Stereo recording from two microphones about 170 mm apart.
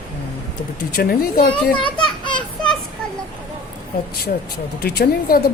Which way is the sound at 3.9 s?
60° left (ahead or behind).